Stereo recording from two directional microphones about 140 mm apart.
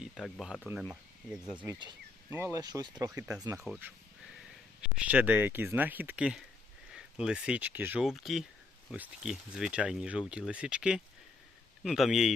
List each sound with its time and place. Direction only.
0.0 s speech: centre (ahead or behind)
2.3 s speech: 20° right (ahead or behind)
4.9 s speech: 10° right (ahead or behind)
8.0 s speech: centre (ahead or behind)